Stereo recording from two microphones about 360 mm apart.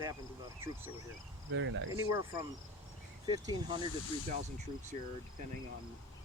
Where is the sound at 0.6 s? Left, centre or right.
Centre.